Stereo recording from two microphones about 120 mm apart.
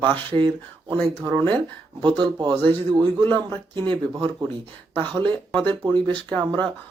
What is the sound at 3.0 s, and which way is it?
Speech, 20° left (ahead or behind).